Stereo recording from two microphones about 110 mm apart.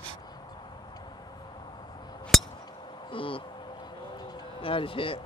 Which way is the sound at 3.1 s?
55° left (ahead or behind).